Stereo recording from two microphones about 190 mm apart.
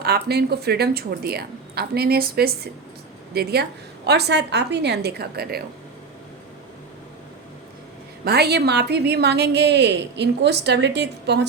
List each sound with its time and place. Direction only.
0.0 s a woman's voice: 55° right (ahead or behind)
8.2 s a woman's voice: 60° right (ahead or behind)